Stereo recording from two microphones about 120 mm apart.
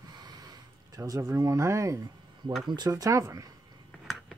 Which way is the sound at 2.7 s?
35° right (ahead or behind).